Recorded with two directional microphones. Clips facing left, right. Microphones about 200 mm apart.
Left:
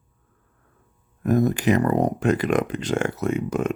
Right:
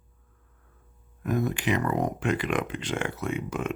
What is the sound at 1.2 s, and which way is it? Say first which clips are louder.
Speech: left 7 dB; 40° left (ahead or behind).